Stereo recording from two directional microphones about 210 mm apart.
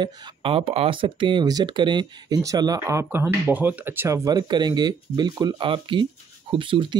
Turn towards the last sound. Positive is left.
turn(degrees=-25)  # may be behind; listen again after turning